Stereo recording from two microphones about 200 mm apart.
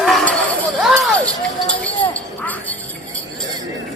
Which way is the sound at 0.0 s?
Centre (ahead or behind).